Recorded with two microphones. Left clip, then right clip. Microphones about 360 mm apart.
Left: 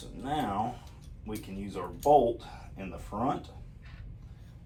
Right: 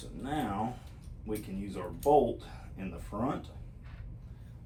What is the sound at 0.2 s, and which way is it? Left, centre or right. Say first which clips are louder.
Speech: left 3 dB; centre.